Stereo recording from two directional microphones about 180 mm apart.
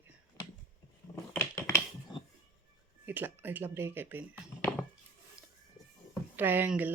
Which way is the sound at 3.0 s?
10° right (ahead or behind).